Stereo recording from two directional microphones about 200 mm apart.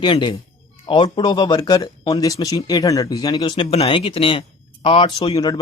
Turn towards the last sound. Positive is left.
turn(degrees=20)  # may be behind; listen again after turning